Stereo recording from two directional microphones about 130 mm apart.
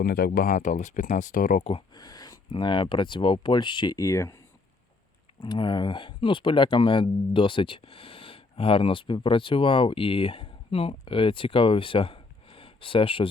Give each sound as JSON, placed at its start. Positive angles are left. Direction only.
{"t": 0.2, "sound": "speech", "side_deg": 80}
{"t": 1.9, "sound": "speech", "side_deg": 30}
{"t": 5.4, "sound": "speech", "side_deg": 35}